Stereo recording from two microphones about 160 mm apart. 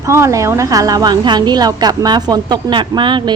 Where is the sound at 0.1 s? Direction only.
20° right (ahead or behind).